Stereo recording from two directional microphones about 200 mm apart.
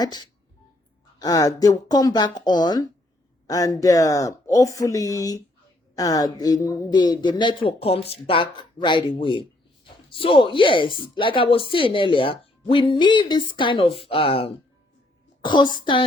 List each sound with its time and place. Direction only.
0.0 s speech: 20° left (ahead or behind)